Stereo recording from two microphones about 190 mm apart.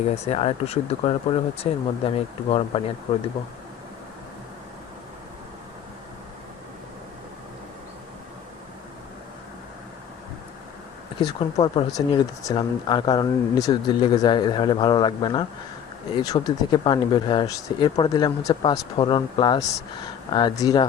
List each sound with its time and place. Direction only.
0.3 s speech: 35° left (ahead or behind)
11.2 s speech: 25° left (ahead or behind)
11.9 s speech: 20° left (ahead or behind)